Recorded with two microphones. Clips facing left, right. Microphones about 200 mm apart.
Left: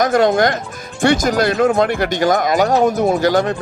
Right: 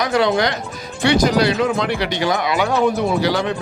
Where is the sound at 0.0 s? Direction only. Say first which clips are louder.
Left 4 dB; 45° left (ahead or behind).